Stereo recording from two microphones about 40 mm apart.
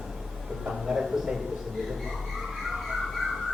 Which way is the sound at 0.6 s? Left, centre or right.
Right.